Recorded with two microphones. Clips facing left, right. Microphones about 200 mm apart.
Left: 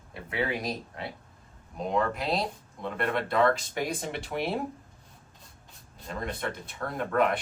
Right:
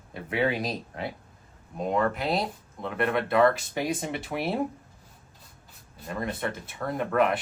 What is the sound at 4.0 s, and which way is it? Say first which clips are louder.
Speech: right 1 dB; centre (ahead or behind).